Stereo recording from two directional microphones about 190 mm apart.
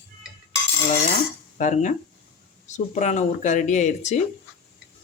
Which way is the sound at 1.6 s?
40° left (ahead or behind).